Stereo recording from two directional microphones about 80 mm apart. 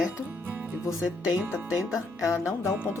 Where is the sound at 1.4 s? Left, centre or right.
Centre.